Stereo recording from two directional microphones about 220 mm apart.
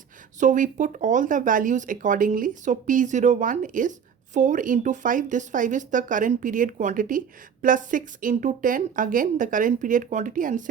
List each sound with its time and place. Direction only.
0.3 s speech: 35° right (ahead or behind)